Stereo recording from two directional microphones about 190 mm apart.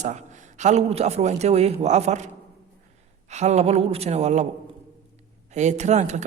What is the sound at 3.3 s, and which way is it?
Speech, 35° right (ahead or behind).